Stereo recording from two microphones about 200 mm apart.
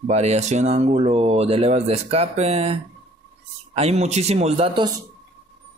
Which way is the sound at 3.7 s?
30° right (ahead or behind).